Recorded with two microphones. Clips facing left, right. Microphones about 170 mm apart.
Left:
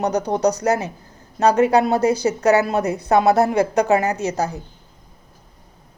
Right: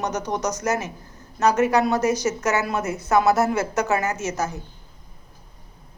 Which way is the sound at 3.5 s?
15° left (ahead or behind).